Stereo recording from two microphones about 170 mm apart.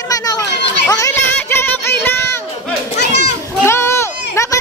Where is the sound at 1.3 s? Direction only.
10° left (ahead or behind).